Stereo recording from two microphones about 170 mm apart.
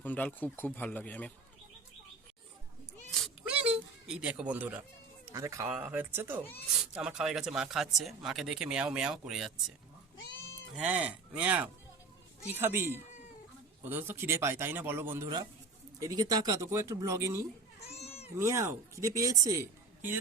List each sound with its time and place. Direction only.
0.0 s speech: 10° left (ahead or behind)
3.4 s a sound: 5° right (ahead or behind)
5.2 s speech: 20° right (ahead or behind)
10.8 s speech: 10° right (ahead or behind)
18.0 s sheep: 35° left (ahead or behind)
18.3 s a woman's voice: 15° right (ahead or behind)